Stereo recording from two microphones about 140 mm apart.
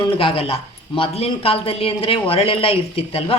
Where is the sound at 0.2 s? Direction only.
40° left (ahead or behind).